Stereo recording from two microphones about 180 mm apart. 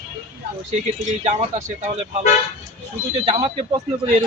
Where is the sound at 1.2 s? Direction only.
40° right (ahead or behind).